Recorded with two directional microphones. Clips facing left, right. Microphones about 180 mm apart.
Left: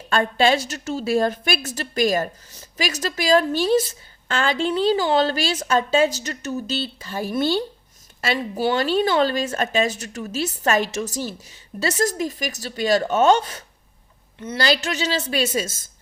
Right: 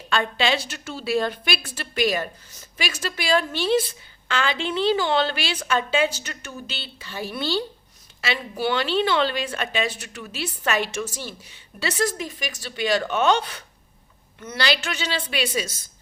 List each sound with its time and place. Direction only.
0.1 s a woman's voice: 45° left (ahead or behind)
14.3 s a woman's voice: 30° left (ahead or behind)
14.6 s a woman's voice: 40° left (ahead or behind)